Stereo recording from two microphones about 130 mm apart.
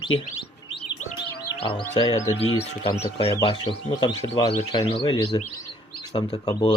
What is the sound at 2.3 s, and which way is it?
Speech, 50° left (ahead or behind).